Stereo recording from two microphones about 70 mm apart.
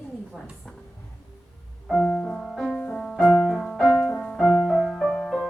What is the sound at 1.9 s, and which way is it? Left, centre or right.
Piano, centre.